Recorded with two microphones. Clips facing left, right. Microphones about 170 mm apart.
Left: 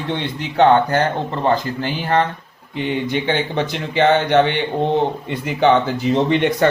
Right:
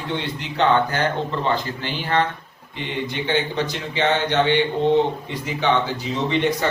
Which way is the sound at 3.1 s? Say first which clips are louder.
Left 3 dB; 55° left (ahead or behind).